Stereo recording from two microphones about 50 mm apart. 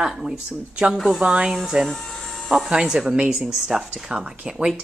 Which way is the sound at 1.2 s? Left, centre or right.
Centre.